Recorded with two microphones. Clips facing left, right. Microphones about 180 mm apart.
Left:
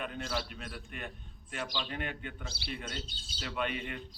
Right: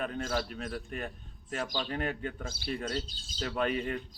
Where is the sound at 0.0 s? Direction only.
45° right (ahead or behind).